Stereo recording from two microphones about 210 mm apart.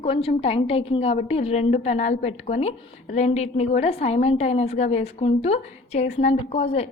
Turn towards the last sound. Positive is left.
turn(degrees=25)  # may be behind; listen again after turning